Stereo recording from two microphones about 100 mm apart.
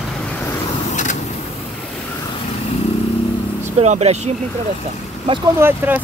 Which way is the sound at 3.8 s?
90° right.